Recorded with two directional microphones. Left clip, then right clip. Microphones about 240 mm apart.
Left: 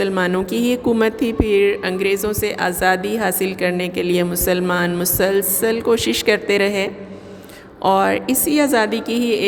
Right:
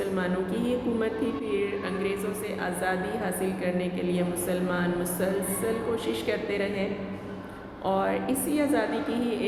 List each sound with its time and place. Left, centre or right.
0.0 s speech: left
7.9 s speech: left